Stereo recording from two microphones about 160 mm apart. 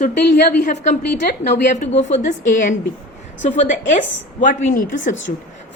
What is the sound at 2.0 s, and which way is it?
A woman's voice, 45° left (ahead or behind).